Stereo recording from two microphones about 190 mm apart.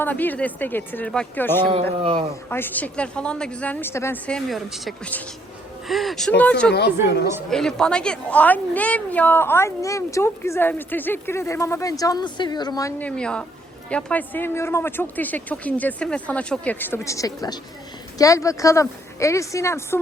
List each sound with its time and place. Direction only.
0.0 s a woman's voice: 10° left (ahead or behind)
13.0 s a woman's voice: 5° left (ahead or behind)